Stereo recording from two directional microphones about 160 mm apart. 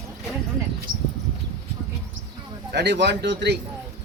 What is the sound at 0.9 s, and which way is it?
Speech, 65° right (ahead or behind).